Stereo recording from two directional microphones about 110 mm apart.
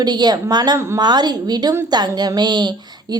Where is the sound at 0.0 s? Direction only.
40° right (ahead or behind).